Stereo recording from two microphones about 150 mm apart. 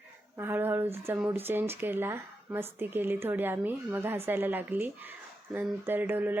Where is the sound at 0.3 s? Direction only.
15° right (ahead or behind).